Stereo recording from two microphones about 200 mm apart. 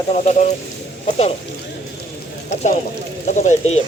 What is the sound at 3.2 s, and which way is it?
Speech, 35° left (ahead or behind).